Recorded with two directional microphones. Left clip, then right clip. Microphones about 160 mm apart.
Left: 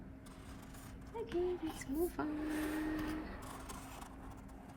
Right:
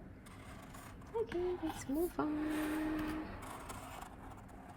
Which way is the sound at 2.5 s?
5° left (ahead or behind).